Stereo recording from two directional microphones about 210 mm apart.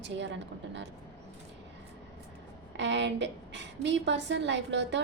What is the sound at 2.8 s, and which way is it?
A woman's voice, 55° right (ahead or behind).